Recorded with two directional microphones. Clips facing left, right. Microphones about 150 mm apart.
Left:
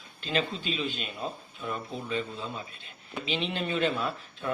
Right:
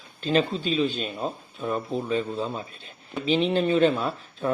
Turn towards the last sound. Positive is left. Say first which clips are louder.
# right 5 dB
turn(degrees=-35)  # may be behind; listen again after turning